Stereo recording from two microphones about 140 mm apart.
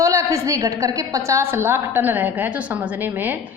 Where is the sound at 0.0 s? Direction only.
25° right (ahead or behind).